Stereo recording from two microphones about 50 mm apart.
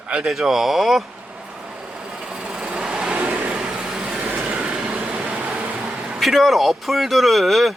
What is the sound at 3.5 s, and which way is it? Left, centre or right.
Vehicle, centre.